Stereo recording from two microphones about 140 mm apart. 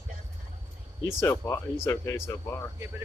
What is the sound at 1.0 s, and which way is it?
Speech, 20° left (ahead or behind).